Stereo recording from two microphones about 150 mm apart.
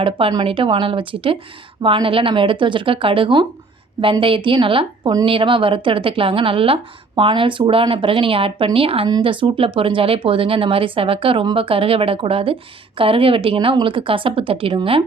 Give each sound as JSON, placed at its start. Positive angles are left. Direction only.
{"t": 0.0, "sound": "a woman's voice", "side_deg": -35}